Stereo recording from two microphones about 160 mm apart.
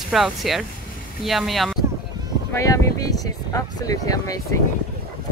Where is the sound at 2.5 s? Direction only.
20° left (ahead or behind).